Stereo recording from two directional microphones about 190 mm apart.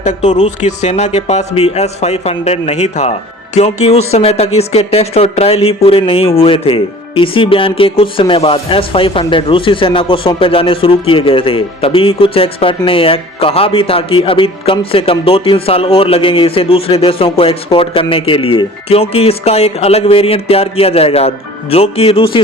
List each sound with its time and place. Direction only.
0.0 s speech: 40° left (ahead or behind)